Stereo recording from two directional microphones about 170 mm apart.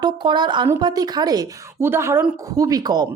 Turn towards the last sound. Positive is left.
turn(degrees=-25)  # may be behind; listen again after turning